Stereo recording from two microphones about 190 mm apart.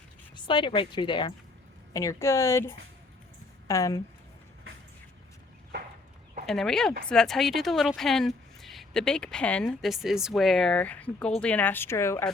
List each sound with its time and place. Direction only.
0.3 s speech: 25° left (ahead or behind)
6.4 s speech: centre (ahead or behind)